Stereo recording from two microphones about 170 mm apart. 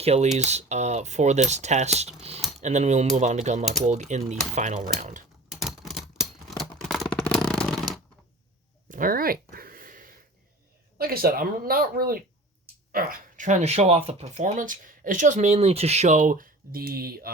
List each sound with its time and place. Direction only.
0.0 s typing: 40° right (ahead or behind)
0.3 s speech: 40° right (ahead or behind)
5.5 s scissors: centre (ahead or behind)
6.7 s shuffling cards: centre (ahead or behind)
8.9 s a sound: 55° right (ahead or behind)
10.9 s speech: 60° right (ahead or behind)